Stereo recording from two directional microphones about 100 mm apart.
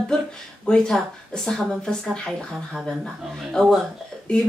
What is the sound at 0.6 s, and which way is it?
Speech, 5° left (ahead or behind).